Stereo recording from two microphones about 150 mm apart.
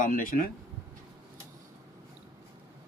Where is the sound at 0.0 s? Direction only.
65° left (ahead or behind).